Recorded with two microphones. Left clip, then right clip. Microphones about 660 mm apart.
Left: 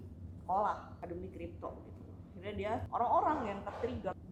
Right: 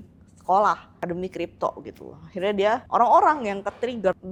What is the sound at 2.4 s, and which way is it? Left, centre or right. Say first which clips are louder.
A woman's voice: right 17 dB; right.